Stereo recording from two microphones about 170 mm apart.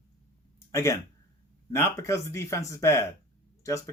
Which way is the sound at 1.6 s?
15° left (ahead or behind).